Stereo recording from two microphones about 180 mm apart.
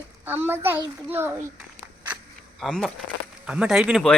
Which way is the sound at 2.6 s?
Centre (ahead or behind).